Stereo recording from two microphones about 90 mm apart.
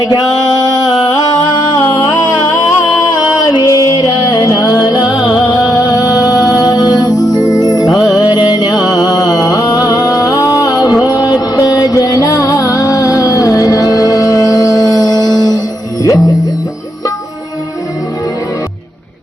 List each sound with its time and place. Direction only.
0.9 s music: 50° left (ahead or behind)